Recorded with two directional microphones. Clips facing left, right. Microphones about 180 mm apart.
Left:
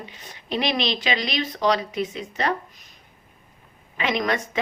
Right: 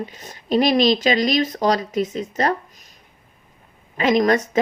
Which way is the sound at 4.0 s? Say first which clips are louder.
Right 7 dB; 40° right (ahead or behind).